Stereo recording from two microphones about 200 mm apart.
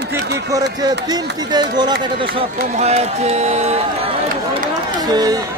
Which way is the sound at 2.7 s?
35° right (ahead or behind).